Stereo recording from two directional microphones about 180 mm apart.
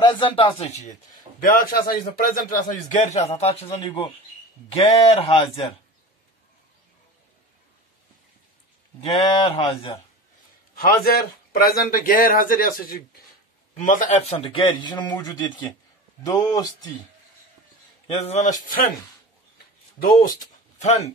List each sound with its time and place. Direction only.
0.0 s a man's voice: 25° left (ahead or behind)
1.4 s a man's voice: 55° left (ahead or behind); by 5.7 s 35° left (ahead or behind)
9.1 s speech: 30° left (ahead or behind)
11.1 s a man's voice: 55° left (ahead or behind); by 16.9 s 20° left (ahead or behind)
18.0 s a man's voice: 35° left (ahead or behind)
20.8 s speech: 40° left (ahead or behind)